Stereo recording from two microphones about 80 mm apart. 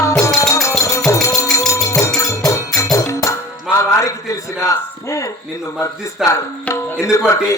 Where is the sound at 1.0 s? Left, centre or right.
Left.